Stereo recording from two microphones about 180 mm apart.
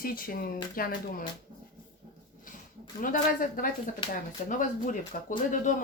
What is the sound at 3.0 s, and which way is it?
Speech, 50° left (ahead or behind).